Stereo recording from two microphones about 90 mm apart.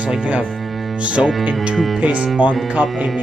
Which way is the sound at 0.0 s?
15° right (ahead or behind).